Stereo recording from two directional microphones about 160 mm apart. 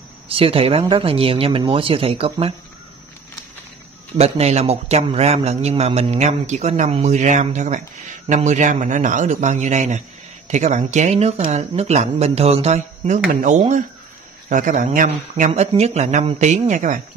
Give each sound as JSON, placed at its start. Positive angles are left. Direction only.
{"t": 0.3, "sound": "speech", "side_deg": -35}
{"t": 4.1, "sound": "a man's voice", "side_deg": -40}